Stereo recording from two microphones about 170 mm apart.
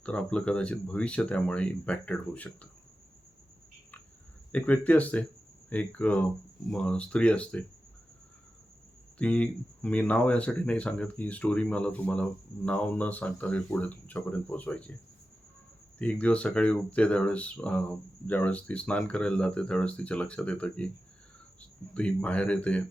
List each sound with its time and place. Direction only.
0.0 s speech: 5° left (ahead or behind)
4.5 s speech: 10° left (ahead or behind)
9.1 s speech: 5° left (ahead or behind)
16.0 s speech: 10° left (ahead or behind)
21.9 s speech: 5° left (ahead or behind)